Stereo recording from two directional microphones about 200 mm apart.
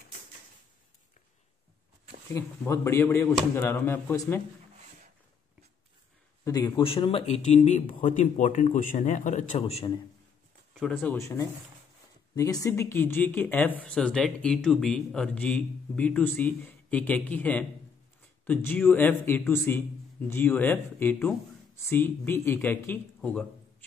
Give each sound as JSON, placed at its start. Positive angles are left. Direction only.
{"t": 2.3, "sound": "speech", "side_deg": 15}
{"t": 6.4, "sound": "speech", "side_deg": 20}
{"t": 8.0, "sound": "a man's voice", "side_deg": 40}
{"t": 10.8, "sound": "speech", "side_deg": 5}